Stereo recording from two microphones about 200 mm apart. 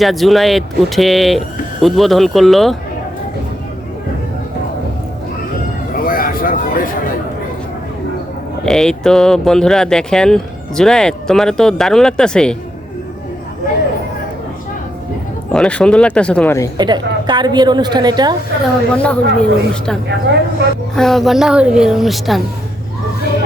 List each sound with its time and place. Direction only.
0.0 s speech: centre (ahead or behind)
5.9 s a sound: 45° left (ahead or behind)
8.6 s speech: 5° left (ahead or behind)
15.5 s speech: 5° left (ahead or behind)
16.7 s a woman's voice: 20° right (ahead or behind)
18.9 s speech: 5° left (ahead or behind)